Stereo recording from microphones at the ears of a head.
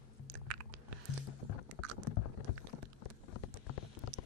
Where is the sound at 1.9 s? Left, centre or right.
Left.